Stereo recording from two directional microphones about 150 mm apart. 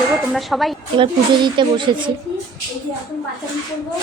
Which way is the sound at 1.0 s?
30° right (ahead or behind).